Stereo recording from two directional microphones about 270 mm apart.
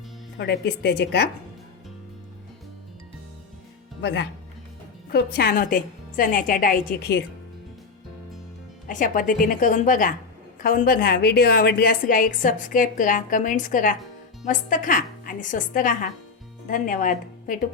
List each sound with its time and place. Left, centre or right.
0.3 s a woman's voice: left
4.0 s a woman's voice: left
8.9 s a woman's voice: left